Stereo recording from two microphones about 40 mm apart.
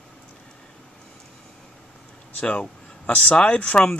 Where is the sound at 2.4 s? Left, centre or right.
Left.